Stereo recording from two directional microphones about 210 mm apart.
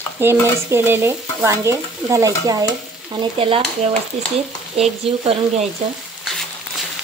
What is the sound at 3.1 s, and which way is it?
Frying, 25° right (ahead or behind).